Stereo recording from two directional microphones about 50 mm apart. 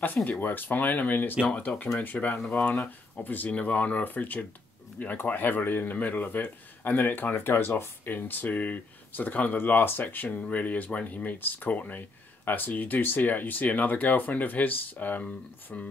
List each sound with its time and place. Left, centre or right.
0.0 s speech: left
9.6 s speech: left